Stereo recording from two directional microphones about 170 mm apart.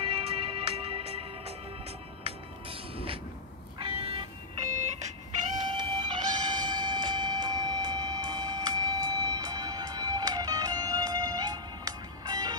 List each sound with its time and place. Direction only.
0.0 s music: 35° right (ahead or behind)
5.7 s music: 30° right (ahead or behind)